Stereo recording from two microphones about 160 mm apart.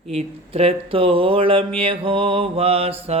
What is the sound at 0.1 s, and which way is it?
Mantra, 40° right (ahead or behind).